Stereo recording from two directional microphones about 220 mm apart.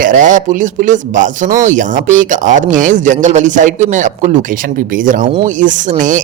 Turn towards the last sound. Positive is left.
turn(degrees=-35)  # may be behind; listen again after turning